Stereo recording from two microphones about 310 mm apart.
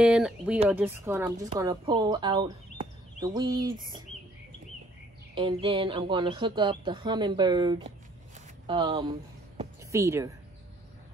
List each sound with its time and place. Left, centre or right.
0.0 s speech: centre
5.3 s speech: centre